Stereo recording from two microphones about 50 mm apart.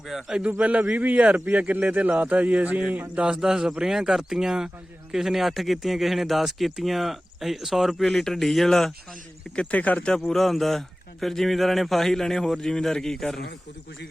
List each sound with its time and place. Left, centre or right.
0.1 s speech: centre
0.6 s a man's voice: right
3.3 s speech: centre
8.0 s speech: centre
9.7 s speech: left
10.2 s speech: centre